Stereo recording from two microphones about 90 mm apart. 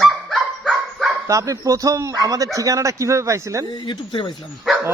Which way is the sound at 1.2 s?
35° right (ahead or behind).